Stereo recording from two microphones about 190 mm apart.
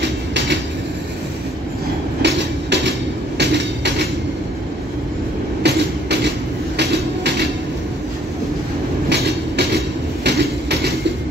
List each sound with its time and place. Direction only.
2.2 s train: 65° right (ahead or behind)
5.6 s train: 65° right (ahead or behind)
9.1 s train: 60° right (ahead or behind)